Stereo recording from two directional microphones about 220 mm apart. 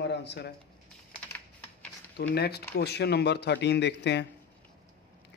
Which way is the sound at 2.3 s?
50° left (ahead or behind).